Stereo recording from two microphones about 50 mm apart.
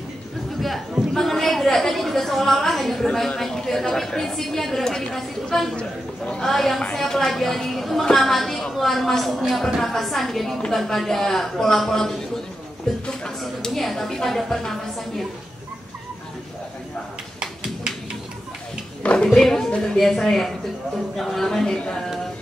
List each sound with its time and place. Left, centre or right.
1.1 s a woman's voice: centre
5.8 s a man's voice: centre
6.4 s a woman's voice: centre
13.4 s a woman's voice: centre
19.2 s a woman's voice: centre